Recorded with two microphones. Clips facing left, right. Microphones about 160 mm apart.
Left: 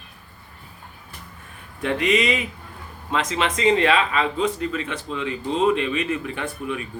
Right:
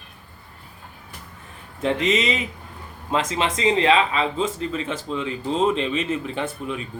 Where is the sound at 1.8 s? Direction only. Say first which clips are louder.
Even; 25° right (ahead or behind).